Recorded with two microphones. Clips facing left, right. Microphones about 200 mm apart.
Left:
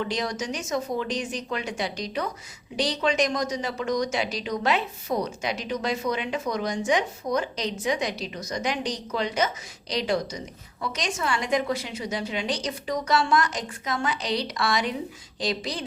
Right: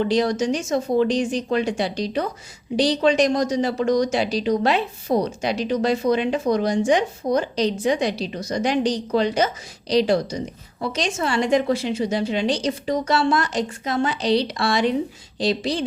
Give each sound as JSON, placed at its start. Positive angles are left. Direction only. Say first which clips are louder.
{"t": 0.0, "sound": "a woman's voice", "louder": "right 9 dB", "side_deg": -30}